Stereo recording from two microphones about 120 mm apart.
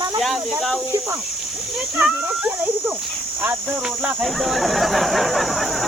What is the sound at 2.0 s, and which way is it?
Speech, 15° right (ahead or behind).